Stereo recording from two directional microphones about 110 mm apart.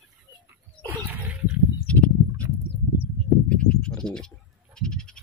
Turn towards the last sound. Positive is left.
turn(degrees=5)  # may be behind; listen again after turning